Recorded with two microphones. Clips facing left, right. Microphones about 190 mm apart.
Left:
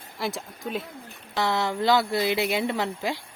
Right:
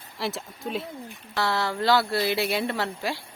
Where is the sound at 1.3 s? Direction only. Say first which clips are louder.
Left 1 dB; 20° left (ahead or behind).